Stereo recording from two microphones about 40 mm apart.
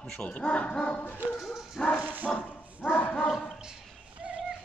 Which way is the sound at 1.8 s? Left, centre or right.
Centre.